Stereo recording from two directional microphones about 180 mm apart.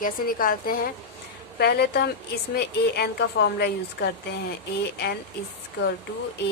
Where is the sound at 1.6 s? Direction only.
65° left (ahead or behind).